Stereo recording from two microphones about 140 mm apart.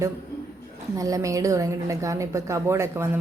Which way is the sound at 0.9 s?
25° right (ahead or behind).